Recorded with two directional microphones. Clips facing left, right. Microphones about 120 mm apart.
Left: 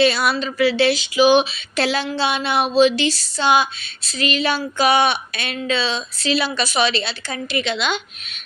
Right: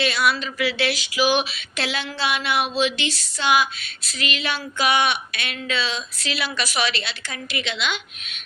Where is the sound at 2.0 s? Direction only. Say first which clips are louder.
Left 4 dB; 30° left (ahead or behind).